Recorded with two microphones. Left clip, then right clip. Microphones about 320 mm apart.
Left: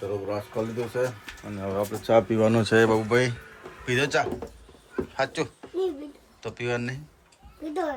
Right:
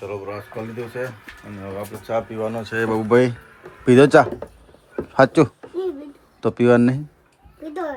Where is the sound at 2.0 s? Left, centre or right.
Left.